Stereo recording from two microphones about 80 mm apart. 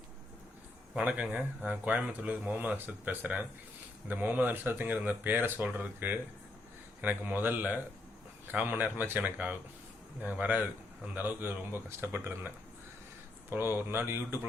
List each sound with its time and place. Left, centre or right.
0.9 s a man's voice: centre
13.5 s a man's voice: right